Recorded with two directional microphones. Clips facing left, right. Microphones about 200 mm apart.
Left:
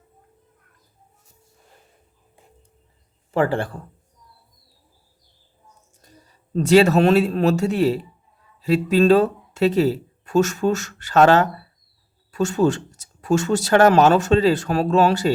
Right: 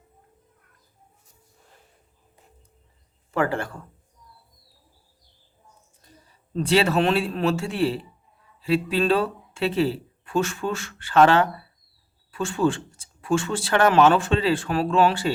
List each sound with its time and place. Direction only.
3.3 s speech: 30° left (ahead or behind)
6.5 s a man's voice: 45° left (ahead or behind)